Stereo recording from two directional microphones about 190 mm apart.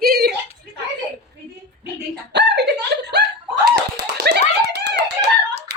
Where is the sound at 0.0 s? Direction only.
55° right (ahead or behind).